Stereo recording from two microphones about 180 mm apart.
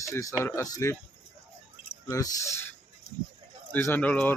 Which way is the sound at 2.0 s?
15° left (ahead or behind).